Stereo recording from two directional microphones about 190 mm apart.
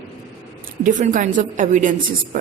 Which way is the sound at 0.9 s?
40° right (ahead or behind).